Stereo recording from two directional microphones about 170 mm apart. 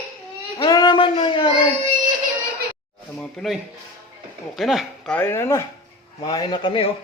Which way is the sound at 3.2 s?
5° left (ahead or behind).